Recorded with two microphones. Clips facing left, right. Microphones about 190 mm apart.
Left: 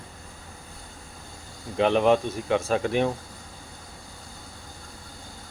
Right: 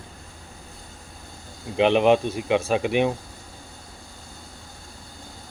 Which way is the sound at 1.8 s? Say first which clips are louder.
Right 2 dB; 20° right (ahead or behind).